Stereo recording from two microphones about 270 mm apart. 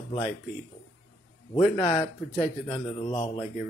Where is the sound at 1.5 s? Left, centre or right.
Left.